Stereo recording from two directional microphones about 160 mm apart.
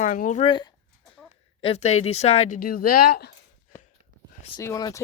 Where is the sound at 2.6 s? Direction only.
65° left (ahead or behind).